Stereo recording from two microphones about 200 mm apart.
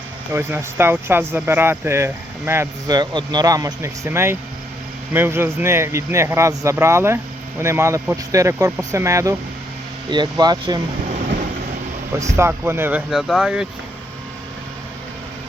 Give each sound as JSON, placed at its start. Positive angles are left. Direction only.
{"t": 0.3, "sound": "speech", "side_deg": -10}
{"t": 12.4, "sound": "speech", "side_deg": -10}